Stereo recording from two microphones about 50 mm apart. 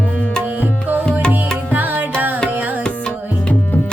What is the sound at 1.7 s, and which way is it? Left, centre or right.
Music, right.